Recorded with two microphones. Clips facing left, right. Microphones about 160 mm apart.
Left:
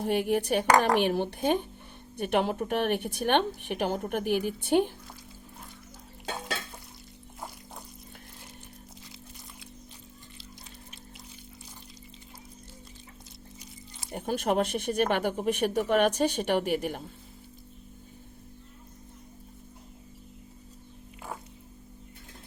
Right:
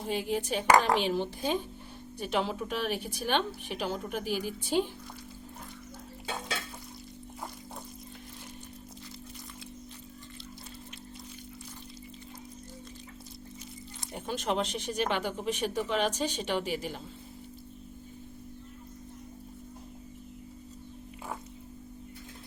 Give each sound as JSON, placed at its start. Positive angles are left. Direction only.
{"t": 0.0, "sound": "speech", "side_deg": 60}
{"t": 14.1, "sound": "speech", "side_deg": 55}